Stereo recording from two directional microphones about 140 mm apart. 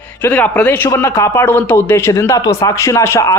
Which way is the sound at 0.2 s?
10° left (ahead or behind).